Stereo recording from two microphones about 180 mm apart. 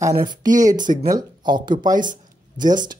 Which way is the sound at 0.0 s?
20° right (ahead or behind).